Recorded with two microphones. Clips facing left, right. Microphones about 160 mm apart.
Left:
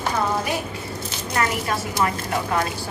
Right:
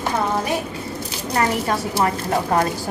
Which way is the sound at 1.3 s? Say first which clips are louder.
Right 3 dB; 35° right (ahead or behind).